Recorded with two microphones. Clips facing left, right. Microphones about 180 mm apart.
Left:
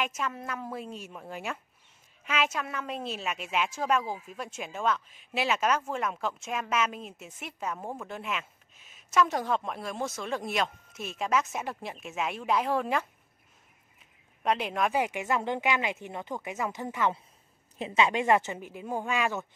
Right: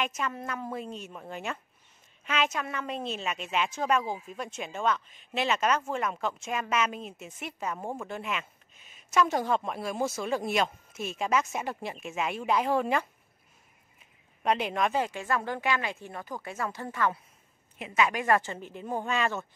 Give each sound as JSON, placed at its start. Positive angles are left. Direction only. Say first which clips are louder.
{"t": 0.0, "sound": "a woman's voice", "louder": "right 1 dB", "side_deg": 5}
{"t": 14.4, "sound": "speech", "louder": "right 1 dB", "side_deg": 0}
{"t": 17.7, "sound": "speech", "louder": "left 2 dB", "side_deg": 30}